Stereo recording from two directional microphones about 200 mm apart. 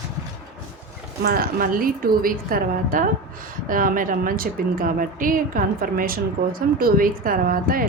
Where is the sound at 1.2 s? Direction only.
50° right (ahead or behind).